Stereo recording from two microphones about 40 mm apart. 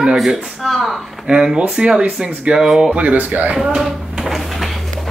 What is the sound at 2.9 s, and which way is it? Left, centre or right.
Speech, right.